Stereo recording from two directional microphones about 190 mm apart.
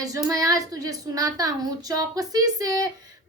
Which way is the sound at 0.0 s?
20° right (ahead or behind).